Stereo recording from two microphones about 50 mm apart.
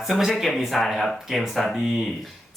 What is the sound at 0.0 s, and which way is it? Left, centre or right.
A woman's voice, centre.